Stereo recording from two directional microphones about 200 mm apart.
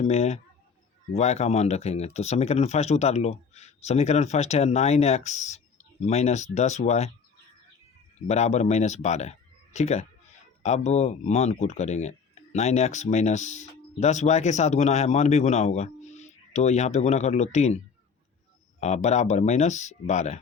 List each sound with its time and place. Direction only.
0.0 s speech: 35° left (ahead or behind)
8.3 s speech: 35° left (ahead or behind)
18.8 s speech: 35° left (ahead or behind)